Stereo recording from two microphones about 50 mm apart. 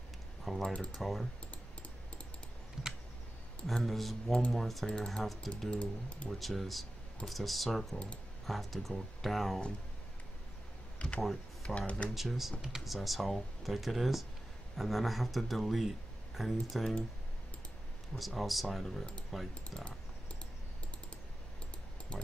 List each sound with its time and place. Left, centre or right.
0.5 s typing: centre
0.9 s speech: centre
3.6 s speech: centre
5.7 s speech: left
6.3 s speech: centre
11.0 s speech: left
12.1 s speech: centre
18.1 s speech: centre